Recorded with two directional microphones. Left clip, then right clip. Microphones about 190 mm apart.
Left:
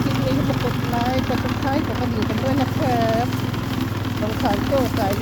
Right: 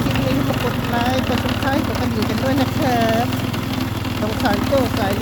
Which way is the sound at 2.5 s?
15° right (ahead or behind).